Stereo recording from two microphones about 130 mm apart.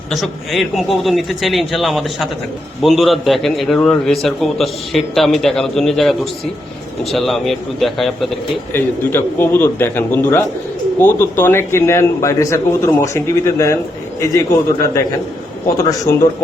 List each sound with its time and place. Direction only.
0.1 s a man's voice: centre (ahead or behind)
8.7 s a man's voice: 15° left (ahead or behind)